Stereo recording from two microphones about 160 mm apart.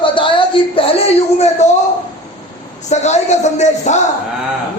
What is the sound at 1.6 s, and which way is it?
Speech, 45° left (ahead or behind).